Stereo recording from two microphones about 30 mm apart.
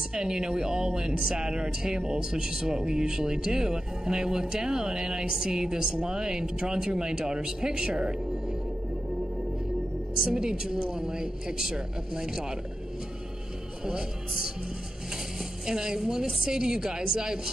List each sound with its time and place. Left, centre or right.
0.1 s speech: right
7.9 s speech: right
10.2 s speech: right
15.6 s speech: right